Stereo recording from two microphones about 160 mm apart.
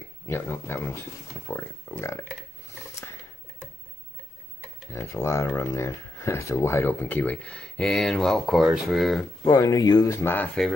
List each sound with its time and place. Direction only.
0.3 s speech: 15° left (ahead or behind)
4.9 s speech: 20° left (ahead or behind); by 9.2 s centre (ahead or behind)
9.5 s speech: 20° left (ahead or behind)